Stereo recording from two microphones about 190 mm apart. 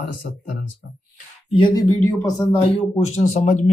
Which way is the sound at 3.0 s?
35° left (ahead or behind).